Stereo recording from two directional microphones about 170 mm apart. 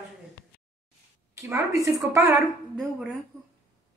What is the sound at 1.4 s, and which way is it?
Speech, 15° right (ahead or behind).